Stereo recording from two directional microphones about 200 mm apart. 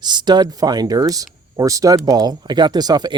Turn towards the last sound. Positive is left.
turn(degrees=-20)  # may be behind; listen again after turning